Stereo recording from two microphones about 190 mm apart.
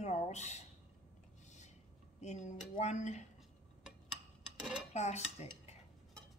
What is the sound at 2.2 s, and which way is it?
Speech, 35° left (ahead or behind).